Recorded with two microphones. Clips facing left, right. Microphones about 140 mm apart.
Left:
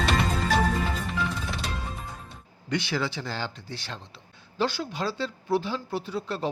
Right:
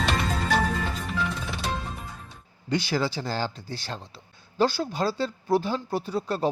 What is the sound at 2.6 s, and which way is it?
Speech, 35° right (ahead or behind).